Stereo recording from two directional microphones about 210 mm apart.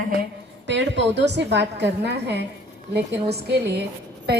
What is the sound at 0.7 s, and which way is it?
A woman's voice, 55° right (ahead or behind).